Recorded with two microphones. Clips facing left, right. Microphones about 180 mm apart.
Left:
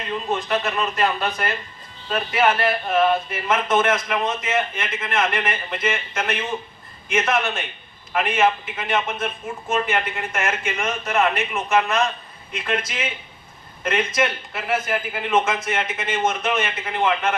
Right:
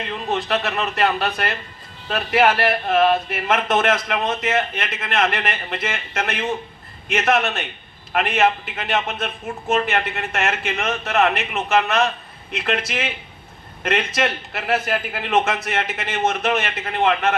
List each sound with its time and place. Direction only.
0.3 s a man's voice: 65° right (ahead or behind)